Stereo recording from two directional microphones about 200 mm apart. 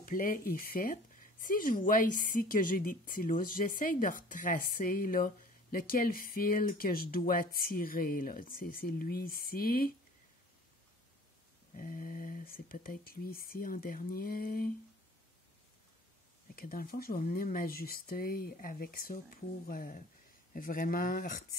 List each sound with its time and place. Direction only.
0.0 s speech: 45° left (ahead or behind)
11.7 s speech: 40° left (ahead or behind)
16.5 s speech: 45° left (ahead or behind)